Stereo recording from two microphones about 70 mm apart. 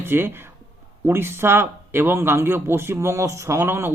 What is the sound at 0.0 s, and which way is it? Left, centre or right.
Speech, right.